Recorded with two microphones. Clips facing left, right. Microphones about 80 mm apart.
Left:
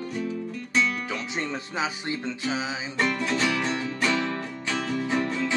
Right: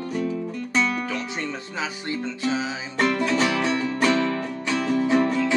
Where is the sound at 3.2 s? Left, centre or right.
Right.